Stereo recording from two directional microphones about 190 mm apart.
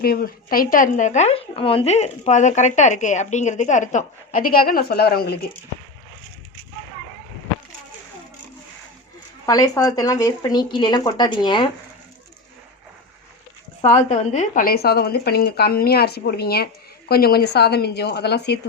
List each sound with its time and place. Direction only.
0.0 s speech: 50° left (ahead or behind)
9.5 s speech: 20° left (ahead or behind)
13.8 s a woman's voice: 35° left (ahead or behind); by 18.6 s 60° left (ahead or behind)